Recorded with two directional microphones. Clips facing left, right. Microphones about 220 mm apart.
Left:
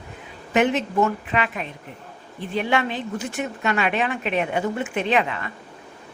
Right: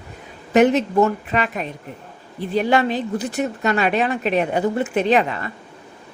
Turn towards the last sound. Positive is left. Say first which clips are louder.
# right 4 dB
turn(degrees=-40)  # may be behind; listen again after turning